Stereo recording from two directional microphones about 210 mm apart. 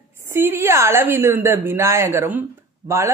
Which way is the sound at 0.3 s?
10° right (ahead or behind).